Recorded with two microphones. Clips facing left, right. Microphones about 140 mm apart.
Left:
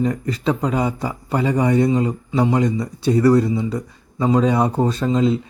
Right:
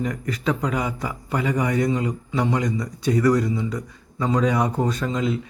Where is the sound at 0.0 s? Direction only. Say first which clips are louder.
Left 5 dB; 30° left (ahead or behind).